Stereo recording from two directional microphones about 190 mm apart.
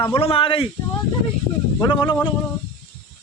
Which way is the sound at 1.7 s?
25° left (ahead or behind).